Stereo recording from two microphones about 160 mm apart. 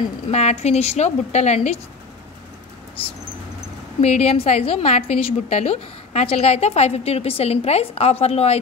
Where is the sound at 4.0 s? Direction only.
40° left (ahead or behind).